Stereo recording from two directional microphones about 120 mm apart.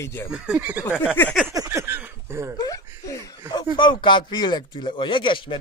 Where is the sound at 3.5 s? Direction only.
40° left (ahead or behind).